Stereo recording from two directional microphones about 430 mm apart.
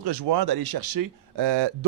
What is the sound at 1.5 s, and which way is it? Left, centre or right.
Speech, right.